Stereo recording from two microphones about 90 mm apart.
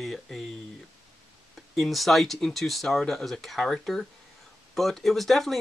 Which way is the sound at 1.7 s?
Centre (ahead or behind).